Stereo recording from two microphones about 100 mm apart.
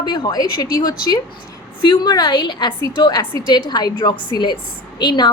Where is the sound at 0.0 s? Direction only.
45° left (ahead or behind).